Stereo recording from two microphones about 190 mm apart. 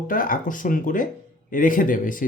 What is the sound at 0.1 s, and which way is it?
Speech, 45° left (ahead or behind).